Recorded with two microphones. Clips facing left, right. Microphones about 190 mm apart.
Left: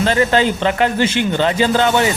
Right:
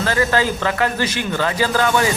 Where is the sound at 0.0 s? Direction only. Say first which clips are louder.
Left 4 dB; 20° left (ahead or behind).